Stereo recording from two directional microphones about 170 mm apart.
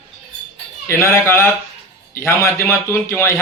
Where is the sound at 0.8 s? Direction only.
15° left (ahead or behind).